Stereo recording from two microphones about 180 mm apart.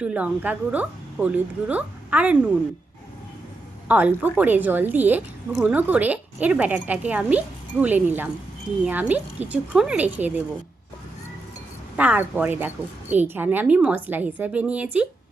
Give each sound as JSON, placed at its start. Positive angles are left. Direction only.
{"t": 0.0, "sound": "a woman's voice", "side_deg": -5}
{"t": 3.8, "sound": "a woman's voice", "side_deg": -10}
{"t": 11.9, "sound": "a woman's voice", "side_deg": -10}